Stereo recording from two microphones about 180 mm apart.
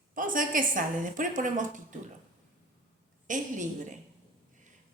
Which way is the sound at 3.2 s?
45° right (ahead or behind).